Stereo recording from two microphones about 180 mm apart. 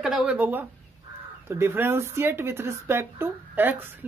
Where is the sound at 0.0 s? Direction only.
5° right (ahead or behind).